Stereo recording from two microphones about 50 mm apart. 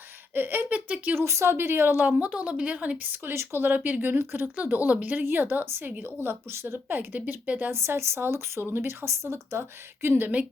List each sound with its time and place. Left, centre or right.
0.3 s a woman's voice: right
1.1 s a woman's voice: right
3.1 s speech: right
3.8 s a woman's voice: right
4.2 s speech: right
4.5 s a woman's voice: right
5.2 s speech: right
6.5 s speech: right
6.8 s a woman's voice: right
7.7 s speech: right
8.2 s speech: right
10.2 s a woman's voice: right